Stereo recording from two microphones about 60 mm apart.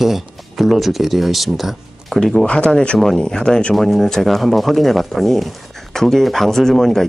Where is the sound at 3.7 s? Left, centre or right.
Centre.